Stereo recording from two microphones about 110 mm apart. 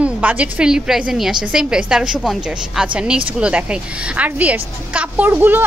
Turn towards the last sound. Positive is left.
turn(degrees=-15)  # may be behind; listen again after turning